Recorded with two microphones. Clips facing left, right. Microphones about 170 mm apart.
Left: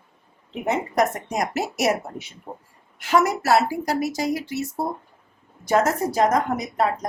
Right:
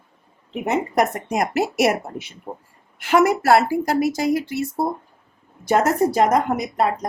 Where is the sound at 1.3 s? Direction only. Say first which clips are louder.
Right 4 dB; 60° right (ahead or behind).